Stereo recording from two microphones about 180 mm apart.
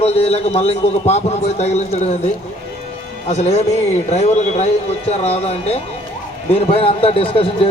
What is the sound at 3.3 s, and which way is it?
A man's voice, 40° left (ahead or behind).